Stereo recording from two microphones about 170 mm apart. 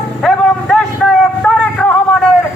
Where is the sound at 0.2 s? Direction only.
Centre (ahead or behind).